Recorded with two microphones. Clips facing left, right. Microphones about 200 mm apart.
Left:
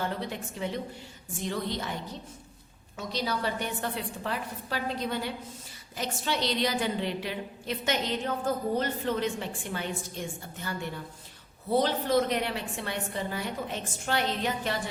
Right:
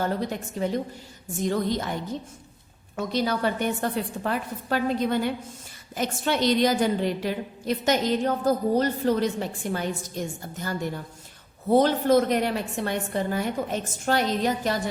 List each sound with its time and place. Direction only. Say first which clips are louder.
0.0 s a woman's voice: right 6 dB; 45° right (ahead or behind)
2.9 s a woman's voice: right 6 dB; 50° right (ahead or behind)